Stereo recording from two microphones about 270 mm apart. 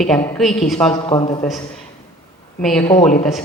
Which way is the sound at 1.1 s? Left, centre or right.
Centre.